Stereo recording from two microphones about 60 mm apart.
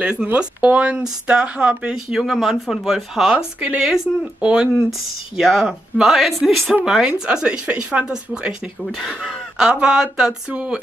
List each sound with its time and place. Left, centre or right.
0.0 s speech: centre
0.3 s speech: right; by 4.1 s centre
4.4 s speech: centre
5.4 s speech: centre